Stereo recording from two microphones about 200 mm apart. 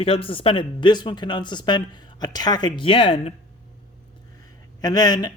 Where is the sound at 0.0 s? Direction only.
25° left (ahead or behind).